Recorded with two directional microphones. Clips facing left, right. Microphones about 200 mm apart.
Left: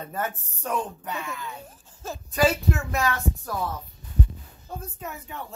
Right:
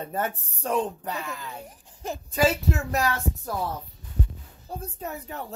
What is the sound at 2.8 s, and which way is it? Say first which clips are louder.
A woman's voice: even; 35° right (ahead or behind).